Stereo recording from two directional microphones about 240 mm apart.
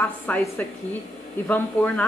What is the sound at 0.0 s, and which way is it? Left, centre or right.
Speech, centre.